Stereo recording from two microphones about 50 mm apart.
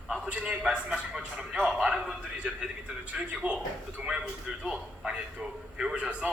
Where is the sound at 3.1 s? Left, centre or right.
Right.